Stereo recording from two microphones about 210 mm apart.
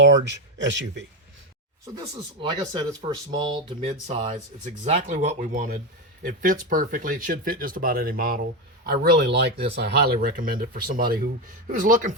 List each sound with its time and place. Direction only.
0.0 s speech: 60° right (ahead or behind)
2.4 s speech: 20° right (ahead or behind); by 12.1 s 35° right (ahead or behind)